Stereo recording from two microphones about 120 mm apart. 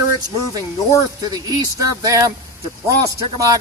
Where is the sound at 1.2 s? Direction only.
30° right (ahead or behind).